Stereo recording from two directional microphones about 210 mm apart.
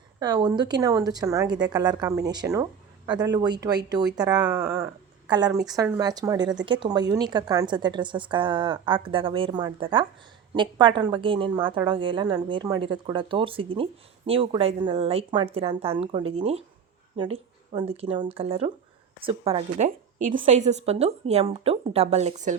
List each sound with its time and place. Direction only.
0.2 s a woman's voice: 20° right (ahead or behind)